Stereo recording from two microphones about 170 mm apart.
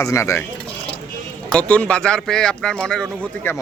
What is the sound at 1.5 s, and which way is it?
Speech, 5° left (ahead or behind).